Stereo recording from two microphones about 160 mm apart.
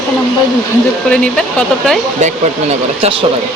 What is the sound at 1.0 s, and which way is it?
Speech, 5° left (ahead or behind).